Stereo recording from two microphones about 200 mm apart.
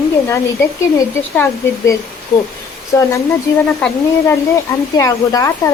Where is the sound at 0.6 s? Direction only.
15° left (ahead or behind).